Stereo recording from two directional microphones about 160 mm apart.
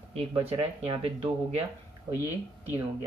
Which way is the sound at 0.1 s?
40° right (ahead or behind).